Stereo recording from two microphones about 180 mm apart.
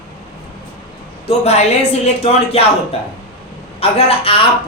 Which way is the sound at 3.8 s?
35° left (ahead or behind).